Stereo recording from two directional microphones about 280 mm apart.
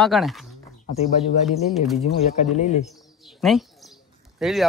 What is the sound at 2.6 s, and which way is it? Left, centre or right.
Speech, left.